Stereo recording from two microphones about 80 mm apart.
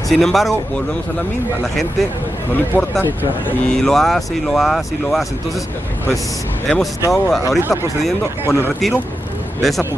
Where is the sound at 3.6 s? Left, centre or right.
Centre.